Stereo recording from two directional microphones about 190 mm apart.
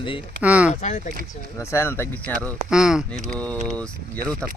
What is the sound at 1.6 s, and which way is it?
Speech, 15° left (ahead or behind).